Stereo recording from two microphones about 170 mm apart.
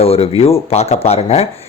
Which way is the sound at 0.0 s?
35° left (ahead or behind).